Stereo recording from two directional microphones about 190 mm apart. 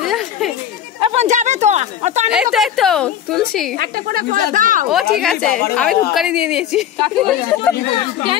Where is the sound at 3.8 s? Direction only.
50° right (ahead or behind).